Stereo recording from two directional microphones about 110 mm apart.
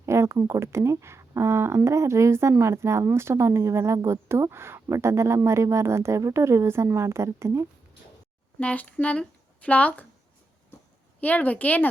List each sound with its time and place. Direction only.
0.0 s speech: 25° right (ahead or behind)
8.5 s speech: 15° left (ahead or behind)
11.2 s speech: 15° left (ahead or behind)